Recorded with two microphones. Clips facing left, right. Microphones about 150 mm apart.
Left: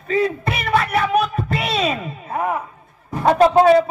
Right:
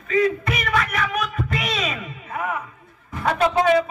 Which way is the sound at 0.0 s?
30° left (ahead or behind).